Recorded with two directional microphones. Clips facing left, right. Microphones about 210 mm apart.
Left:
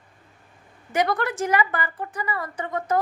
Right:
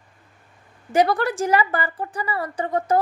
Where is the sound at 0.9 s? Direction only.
30° right (ahead or behind).